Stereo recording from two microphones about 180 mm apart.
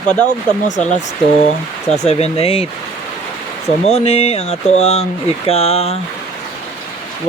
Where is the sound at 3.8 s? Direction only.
35° left (ahead or behind).